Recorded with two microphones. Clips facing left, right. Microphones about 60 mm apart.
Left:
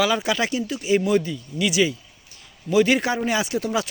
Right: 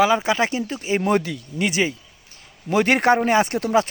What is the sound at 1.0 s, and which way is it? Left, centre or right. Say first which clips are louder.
Speech: right 1 dB; right.